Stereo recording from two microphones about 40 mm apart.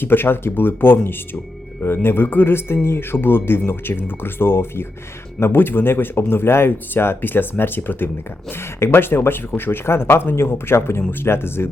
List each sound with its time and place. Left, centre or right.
0.0 s speech: left
5.4 s speech: left
11.1 s speech: left